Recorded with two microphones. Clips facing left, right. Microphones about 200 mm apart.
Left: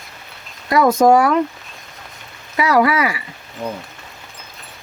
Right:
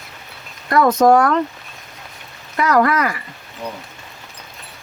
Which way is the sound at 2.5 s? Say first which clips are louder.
Left 1 dB; 10° left (ahead or behind).